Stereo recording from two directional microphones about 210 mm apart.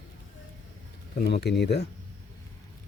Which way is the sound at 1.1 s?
50° left (ahead or behind).